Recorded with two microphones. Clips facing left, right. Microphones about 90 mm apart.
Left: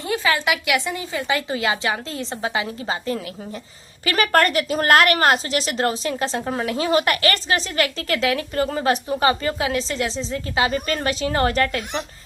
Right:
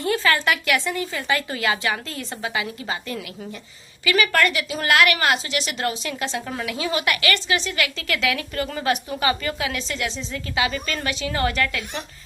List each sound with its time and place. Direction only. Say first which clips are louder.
0.0 s a woman's voice: right 1 dB; 15° left (ahead or behind)
4.0 s a woman's voice: left 2 dB; 40° left (ahead or behind)